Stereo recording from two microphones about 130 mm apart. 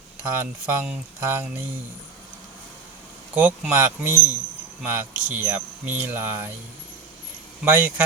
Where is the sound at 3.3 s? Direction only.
15° right (ahead or behind).